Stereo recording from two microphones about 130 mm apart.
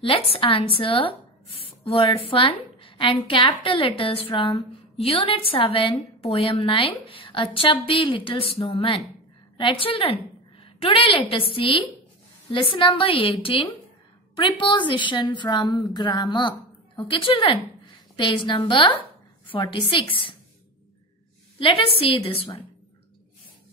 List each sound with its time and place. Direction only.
0.0 s a woman's voice: 45° left (ahead or behind)
21.5 s a woman's voice: 45° left (ahead or behind)